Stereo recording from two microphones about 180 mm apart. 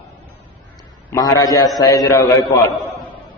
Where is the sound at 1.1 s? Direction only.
20° left (ahead or behind).